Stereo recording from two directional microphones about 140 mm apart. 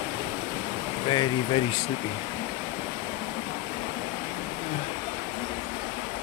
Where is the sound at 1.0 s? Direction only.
35° left (ahead or behind).